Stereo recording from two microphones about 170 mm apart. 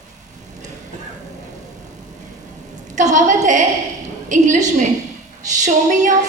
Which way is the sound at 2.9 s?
45° right (ahead or behind).